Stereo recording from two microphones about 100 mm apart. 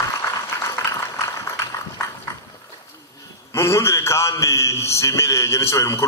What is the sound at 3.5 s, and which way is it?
A man's voice, 30° left (ahead or behind).